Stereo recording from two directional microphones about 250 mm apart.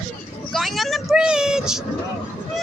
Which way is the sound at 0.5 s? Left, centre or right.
Centre.